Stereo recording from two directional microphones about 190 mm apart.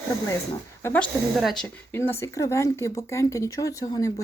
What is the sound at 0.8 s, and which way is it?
Speech, 10° left (ahead or behind).